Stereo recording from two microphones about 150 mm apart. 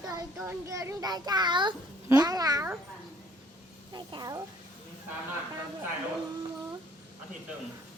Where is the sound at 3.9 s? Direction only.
30° right (ahead or behind).